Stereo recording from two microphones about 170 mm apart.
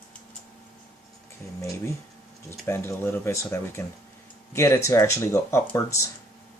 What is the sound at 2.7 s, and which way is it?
Speech, 15° left (ahead or behind).